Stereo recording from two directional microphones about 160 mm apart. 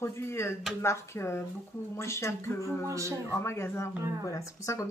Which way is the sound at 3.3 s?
15° left (ahead or behind).